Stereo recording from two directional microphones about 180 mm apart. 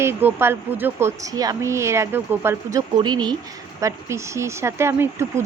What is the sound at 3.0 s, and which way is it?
Speech, 25° right (ahead or behind).